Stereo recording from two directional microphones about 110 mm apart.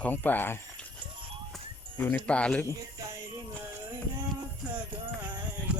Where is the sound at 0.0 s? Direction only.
15° left (ahead or behind).